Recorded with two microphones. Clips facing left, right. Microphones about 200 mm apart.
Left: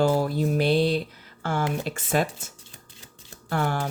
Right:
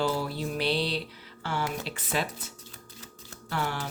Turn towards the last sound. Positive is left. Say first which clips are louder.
# left 6 dB
turn(degrees=50)  # may be behind; listen again after turning